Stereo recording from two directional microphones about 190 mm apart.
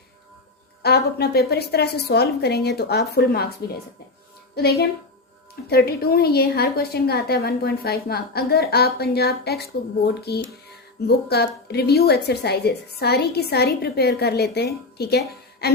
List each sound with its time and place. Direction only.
0.8 s a woman's voice: 55° left (ahead or behind)